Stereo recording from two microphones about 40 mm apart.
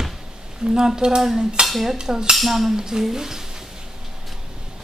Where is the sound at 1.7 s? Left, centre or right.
Centre.